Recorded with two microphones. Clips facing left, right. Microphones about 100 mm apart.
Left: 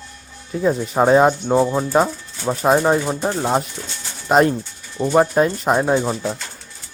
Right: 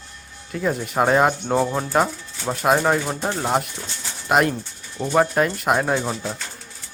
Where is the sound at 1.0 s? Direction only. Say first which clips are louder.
Left 5 dB; 15° left (ahead or behind).